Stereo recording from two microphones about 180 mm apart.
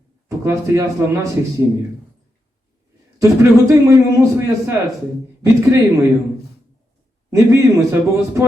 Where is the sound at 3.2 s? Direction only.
15° right (ahead or behind).